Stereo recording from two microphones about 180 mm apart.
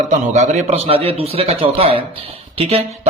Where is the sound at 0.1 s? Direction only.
40° right (ahead or behind).